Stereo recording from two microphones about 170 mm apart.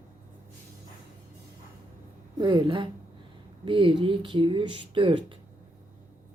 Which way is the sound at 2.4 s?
25° right (ahead or behind).